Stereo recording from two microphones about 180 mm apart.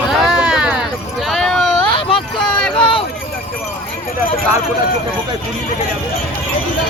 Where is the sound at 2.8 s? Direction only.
30° left (ahead or behind).